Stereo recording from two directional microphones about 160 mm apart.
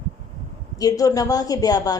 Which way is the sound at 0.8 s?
20° left (ahead or behind).